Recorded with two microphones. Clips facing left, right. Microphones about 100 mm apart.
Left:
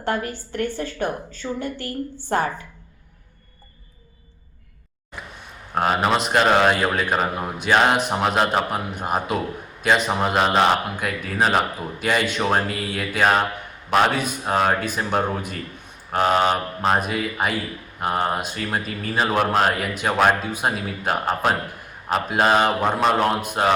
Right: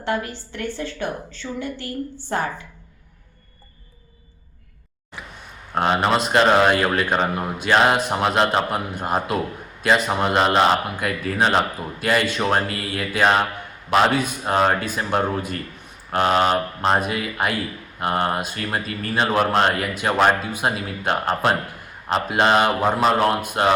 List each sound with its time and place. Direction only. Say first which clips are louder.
0.0 s a woman's voice: even; 45° left (ahead or behind)
5.7 s speech: right 1 dB; 5° left (ahead or behind)